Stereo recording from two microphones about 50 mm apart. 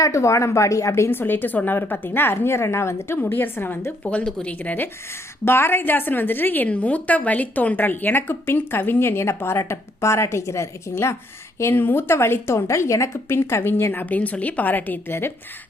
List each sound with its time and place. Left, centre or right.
0.1 s speech: left
1.1 s speech: left
3.2 s speech: left
4.0 s speech: left
5.5 s a woman's voice: left
6.7 s speech: left
10.9 s speech: left
11.7 s speech: left